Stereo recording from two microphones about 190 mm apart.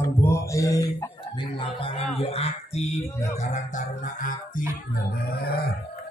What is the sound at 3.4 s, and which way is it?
Music, 40° left (ahead or behind).